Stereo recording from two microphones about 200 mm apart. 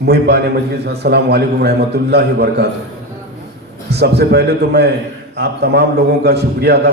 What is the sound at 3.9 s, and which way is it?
A man's voice, 55° right (ahead or behind).